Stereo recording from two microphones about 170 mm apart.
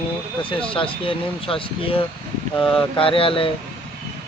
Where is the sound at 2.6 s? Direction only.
5° left (ahead or behind).